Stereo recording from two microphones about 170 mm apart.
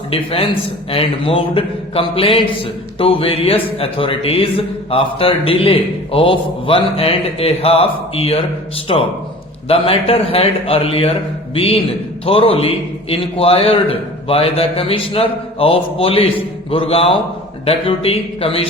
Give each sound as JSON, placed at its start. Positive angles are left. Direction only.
{"t": 0.1, "sound": "speech", "side_deg": 35}